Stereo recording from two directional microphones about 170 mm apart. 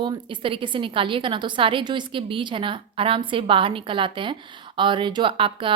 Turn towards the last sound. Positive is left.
turn(degrees=-30)  # may be behind; listen again after turning